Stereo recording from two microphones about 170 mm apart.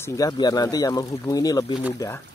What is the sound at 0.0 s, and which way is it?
Speech, 20° left (ahead or behind).